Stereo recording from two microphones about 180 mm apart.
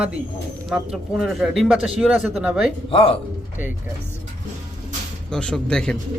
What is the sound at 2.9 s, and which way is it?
Speech, 30° left (ahead or behind).